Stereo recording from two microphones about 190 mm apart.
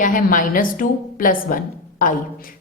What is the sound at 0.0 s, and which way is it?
A woman's voice, 45° left (ahead or behind).